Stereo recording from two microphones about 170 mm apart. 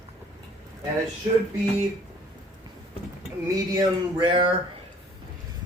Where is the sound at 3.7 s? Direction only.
30° right (ahead or behind).